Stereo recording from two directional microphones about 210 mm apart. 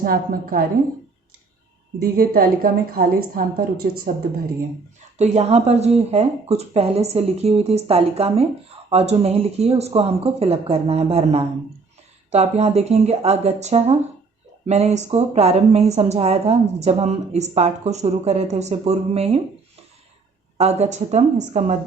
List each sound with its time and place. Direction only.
0.0 s a woman's voice: 45° right (ahead or behind)
2.0 s a woman's voice: 45° right (ahead or behind)
5.1 s a woman's voice: 30° right (ahead or behind)
20.6 s a woman's voice: 30° right (ahead or behind)